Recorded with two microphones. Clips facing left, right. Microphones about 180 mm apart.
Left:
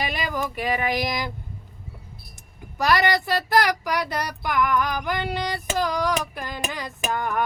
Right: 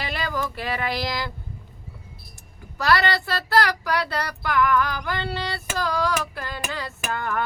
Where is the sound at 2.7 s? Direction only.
15° left (ahead or behind).